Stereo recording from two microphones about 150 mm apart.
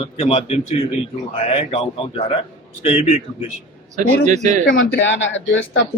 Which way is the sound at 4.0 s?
50° right (ahead or behind).